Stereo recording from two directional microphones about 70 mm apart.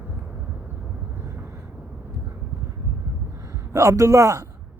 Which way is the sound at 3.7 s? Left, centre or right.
Right.